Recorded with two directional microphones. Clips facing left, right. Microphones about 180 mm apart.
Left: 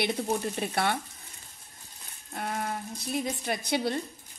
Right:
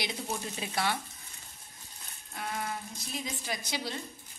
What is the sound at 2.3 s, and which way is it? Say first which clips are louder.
A woman's voice: left 4 dB; 45° left (ahead or behind).